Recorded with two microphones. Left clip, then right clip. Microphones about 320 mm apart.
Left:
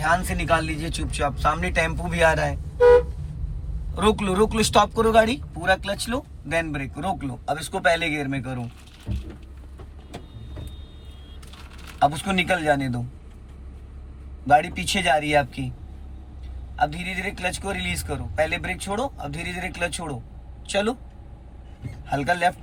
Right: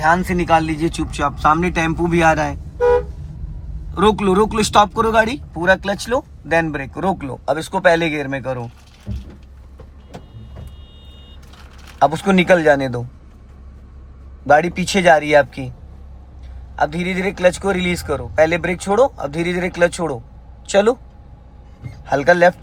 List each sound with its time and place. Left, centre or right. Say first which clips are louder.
0.0 s speech: right 7 dB; centre
3.9 s speech: right 7 dB; centre
11.9 s speech: right 6 dB; centre
14.4 s speech: right 5 dB; right
16.7 s speech: right 5 dB; centre
22.0 s speech: right 9 dB; right